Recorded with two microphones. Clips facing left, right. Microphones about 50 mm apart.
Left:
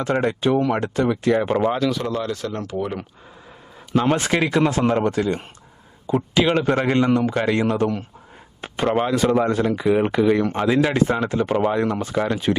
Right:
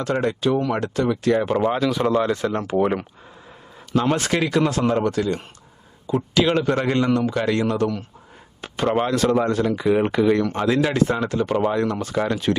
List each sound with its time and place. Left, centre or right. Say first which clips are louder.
0.0 s a man's voice: left 1 dB; left
1.7 s speech: even; centre
2.0 s speech: right 5 dB; centre
3.9 s a man's voice: left 1 dB; centre
8.9 s speech: even; centre
9.7 s speech: even; centre
10.4 s a man's voice: left 1 dB; left
12.1 s speech: even; centre